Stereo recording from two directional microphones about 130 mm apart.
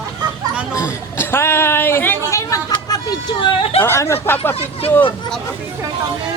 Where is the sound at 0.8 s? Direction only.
20° left (ahead or behind).